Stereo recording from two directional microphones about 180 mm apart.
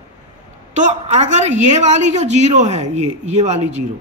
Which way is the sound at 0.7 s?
40° right (ahead or behind).